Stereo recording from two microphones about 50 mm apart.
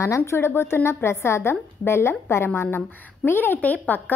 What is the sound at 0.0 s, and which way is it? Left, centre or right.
Speech, left.